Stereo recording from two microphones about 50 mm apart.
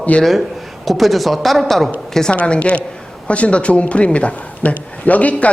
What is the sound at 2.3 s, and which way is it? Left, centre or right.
A man's voice, left.